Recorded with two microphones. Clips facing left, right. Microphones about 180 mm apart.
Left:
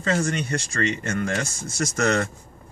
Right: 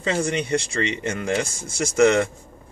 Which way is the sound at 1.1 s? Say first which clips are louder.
Right 2 dB; 10° right (ahead or behind).